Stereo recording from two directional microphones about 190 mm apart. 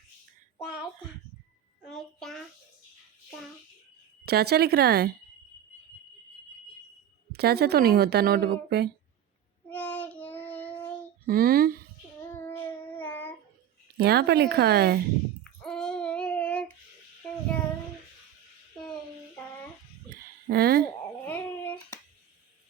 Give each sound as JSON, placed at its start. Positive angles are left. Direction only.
{"t": 1.9, "sound": "a sound", "side_deg": 5}
{"t": 4.3, "sound": "speech", "side_deg": -55}
{"t": 7.3, "sound": "speech", "side_deg": -55}
{"t": 9.6, "sound": "child singing", "side_deg": 10}
{"t": 11.3, "sound": "speech", "side_deg": -50}
{"t": 12.3, "sound": "child singing", "side_deg": 10}
{"t": 13.9, "sound": "speech", "side_deg": -60}
{"t": 15.6, "sound": "child singing", "side_deg": 5}
{"t": 20.5, "sound": "a sound", "side_deg": -55}
{"t": 21.2, "sound": "a sound", "side_deg": 10}